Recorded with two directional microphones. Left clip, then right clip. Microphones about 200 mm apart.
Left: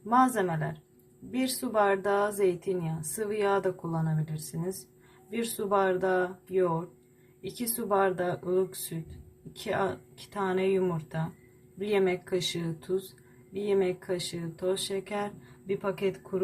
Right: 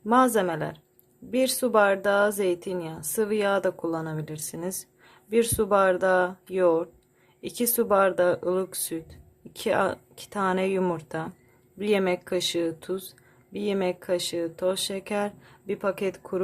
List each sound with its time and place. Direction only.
0.1 s a woman's voice: 50° right (ahead or behind)
5.3 s a woman's voice: 50° right (ahead or behind)